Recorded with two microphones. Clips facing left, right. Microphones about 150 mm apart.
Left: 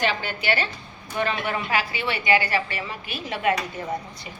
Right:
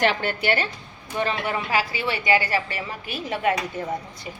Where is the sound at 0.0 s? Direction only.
65° right (ahead or behind).